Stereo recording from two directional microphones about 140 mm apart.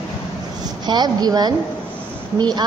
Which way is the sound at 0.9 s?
30° right (ahead or behind).